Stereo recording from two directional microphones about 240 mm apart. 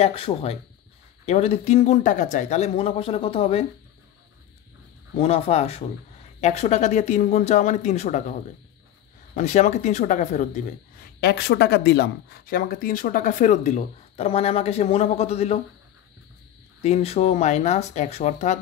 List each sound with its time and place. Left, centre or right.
0.0 s speech: left
5.1 s speech: left
11.1 s speech: left
16.8 s speech: left